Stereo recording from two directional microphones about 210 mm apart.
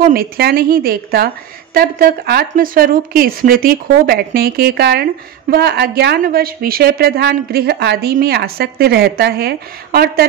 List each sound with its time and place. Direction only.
0.0 s a woman's voice: 45° right (ahead or behind)